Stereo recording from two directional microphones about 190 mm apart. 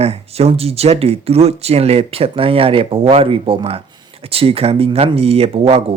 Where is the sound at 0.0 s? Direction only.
30° right (ahead or behind).